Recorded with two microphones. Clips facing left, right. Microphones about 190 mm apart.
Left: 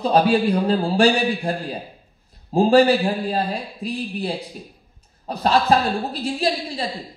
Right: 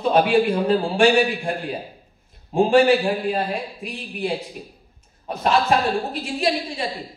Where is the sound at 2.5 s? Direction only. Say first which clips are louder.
Left 1 dB; 35° left (ahead or behind).